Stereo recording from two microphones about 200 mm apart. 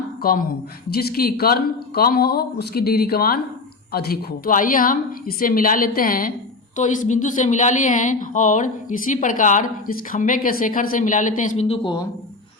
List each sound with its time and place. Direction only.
0.2 s a woman's voice: 45° left (ahead or behind); by 12.0 s 25° left (ahead or behind)